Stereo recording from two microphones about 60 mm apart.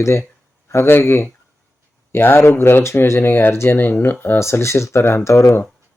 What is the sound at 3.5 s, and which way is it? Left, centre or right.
Speech, left.